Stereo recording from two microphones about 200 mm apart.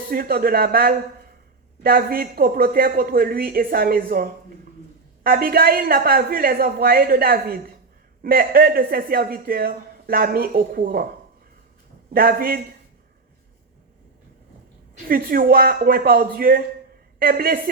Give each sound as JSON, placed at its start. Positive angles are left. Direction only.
{"t": 0.1, "sound": "speech", "side_deg": -50}
{"t": 12.1, "sound": "speech", "side_deg": -45}
{"t": 15.0, "sound": "speech", "side_deg": -50}